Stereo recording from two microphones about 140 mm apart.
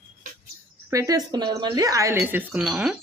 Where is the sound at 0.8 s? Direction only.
25° right (ahead or behind).